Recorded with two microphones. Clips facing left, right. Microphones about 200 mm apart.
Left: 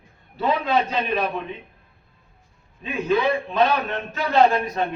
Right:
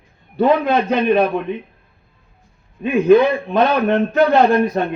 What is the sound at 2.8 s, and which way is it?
A man's voice, 55° right (ahead or behind).